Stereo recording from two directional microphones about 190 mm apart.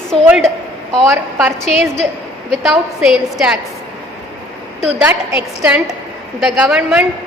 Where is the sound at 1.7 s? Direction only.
35° left (ahead or behind).